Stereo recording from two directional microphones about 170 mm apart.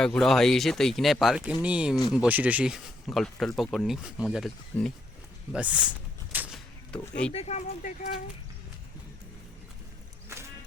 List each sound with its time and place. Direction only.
0.0 s speech: 5° left (ahead or behind)
6.3 s a sound: 10° right (ahead or behind)
6.9 s speech: 5° left (ahead or behind)
7.3 s speech: 40° left (ahead or behind)